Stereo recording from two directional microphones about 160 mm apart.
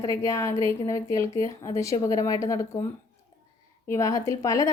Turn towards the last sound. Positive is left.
turn(degrees=20)  # may be behind; listen again after turning